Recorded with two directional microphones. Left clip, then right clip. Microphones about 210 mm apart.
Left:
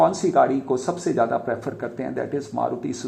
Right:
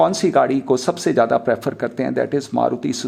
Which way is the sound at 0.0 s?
25° right (ahead or behind).